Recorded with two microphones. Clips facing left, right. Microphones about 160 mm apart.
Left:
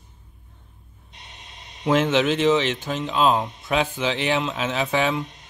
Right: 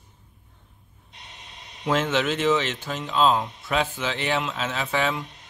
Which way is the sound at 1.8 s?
15° left (ahead or behind).